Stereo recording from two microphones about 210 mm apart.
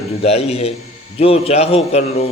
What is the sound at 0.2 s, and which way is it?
A man's voice, 30° left (ahead or behind).